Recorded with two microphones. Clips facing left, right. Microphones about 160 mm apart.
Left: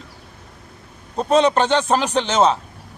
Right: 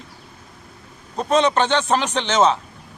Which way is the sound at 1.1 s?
10° left (ahead or behind).